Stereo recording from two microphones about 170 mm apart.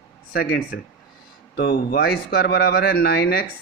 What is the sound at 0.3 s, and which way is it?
Speech, 70° left (ahead or behind).